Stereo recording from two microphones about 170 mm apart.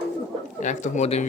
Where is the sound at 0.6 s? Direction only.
45° left (ahead or behind).